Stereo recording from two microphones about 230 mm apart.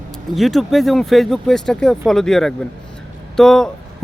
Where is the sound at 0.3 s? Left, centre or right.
Centre.